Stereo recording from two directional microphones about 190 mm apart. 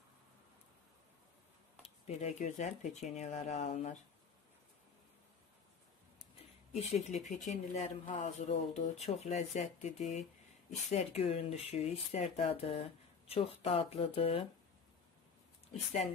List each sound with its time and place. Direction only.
2.0 s speech: 35° left (ahead or behind)
6.8 s speech: 35° left (ahead or behind)
15.7 s speech: 40° left (ahead or behind)